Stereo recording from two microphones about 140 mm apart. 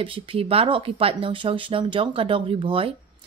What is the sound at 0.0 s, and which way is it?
Speech, 40° right (ahead or behind).